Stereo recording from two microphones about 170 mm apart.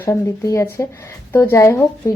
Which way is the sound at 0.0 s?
15° left (ahead or behind).